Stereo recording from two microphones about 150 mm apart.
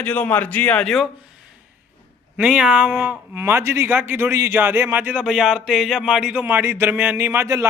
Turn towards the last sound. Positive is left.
turn(degrees=-20)  # may be behind; listen again after turning